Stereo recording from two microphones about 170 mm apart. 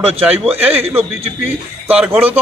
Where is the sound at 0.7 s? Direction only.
35° right (ahead or behind).